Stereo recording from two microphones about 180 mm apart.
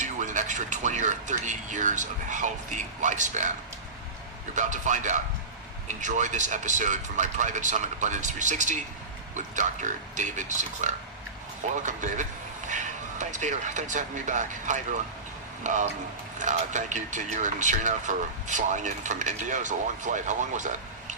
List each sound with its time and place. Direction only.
0.0 s speech: 40° right (ahead or behind)
4.5 s speech: 40° right (ahead or behind)